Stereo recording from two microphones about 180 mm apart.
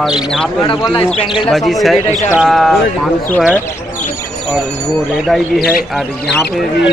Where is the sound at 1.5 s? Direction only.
Centre (ahead or behind).